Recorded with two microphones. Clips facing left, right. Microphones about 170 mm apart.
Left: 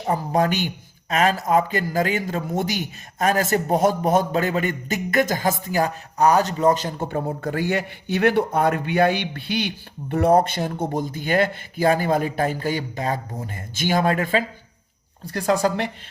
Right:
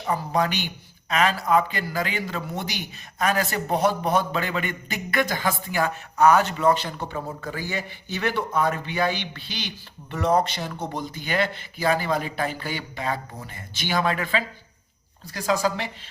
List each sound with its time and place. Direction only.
0.0 s speech: 45° left (ahead or behind)
15.3 s speech: 60° left (ahead or behind)